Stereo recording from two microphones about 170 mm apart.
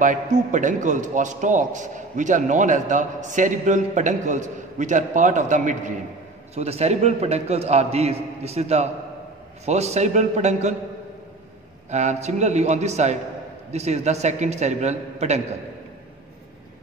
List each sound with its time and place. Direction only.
0.0 s a man's voice: 50° right (ahead or behind)
11.9 s a man's voice: 45° right (ahead or behind)